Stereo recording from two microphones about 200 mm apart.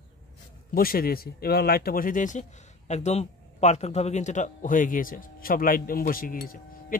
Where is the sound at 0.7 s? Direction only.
45° left (ahead or behind).